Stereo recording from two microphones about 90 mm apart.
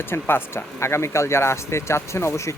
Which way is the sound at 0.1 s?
25° left (ahead or behind).